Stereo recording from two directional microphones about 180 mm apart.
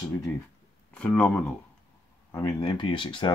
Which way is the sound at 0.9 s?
5° left (ahead or behind).